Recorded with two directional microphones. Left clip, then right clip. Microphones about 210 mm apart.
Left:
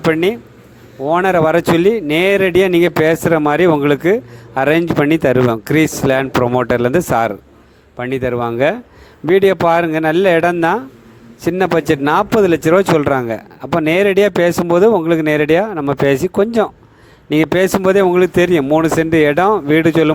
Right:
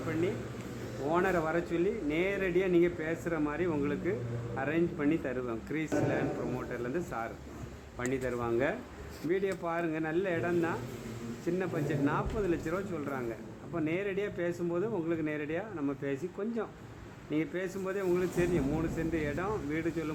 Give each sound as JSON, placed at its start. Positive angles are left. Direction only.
{"t": 1.1, "sound": "a man's voice", "side_deg": 50}
{"t": 7.9, "sound": "a man's voice", "side_deg": 45}